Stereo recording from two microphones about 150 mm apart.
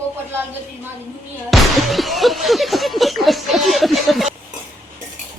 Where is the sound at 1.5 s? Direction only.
Centre (ahead or behind).